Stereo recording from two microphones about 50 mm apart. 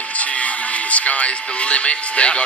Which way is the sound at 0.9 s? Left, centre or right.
Left.